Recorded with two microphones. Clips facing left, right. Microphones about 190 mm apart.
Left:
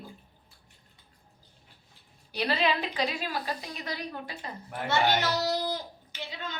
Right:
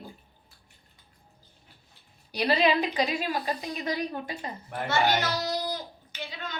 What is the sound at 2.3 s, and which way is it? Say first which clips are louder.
Speech: right 4 dB; 15° right (ahead or behind).